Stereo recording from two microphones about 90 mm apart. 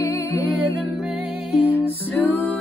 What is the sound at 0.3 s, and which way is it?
Music, 20° left (ahead or behind).